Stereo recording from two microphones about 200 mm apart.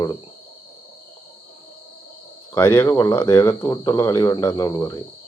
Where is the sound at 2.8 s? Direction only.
15° left (ahead or behind).